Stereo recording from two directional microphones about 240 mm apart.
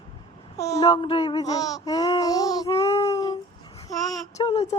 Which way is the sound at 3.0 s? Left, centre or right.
Centre.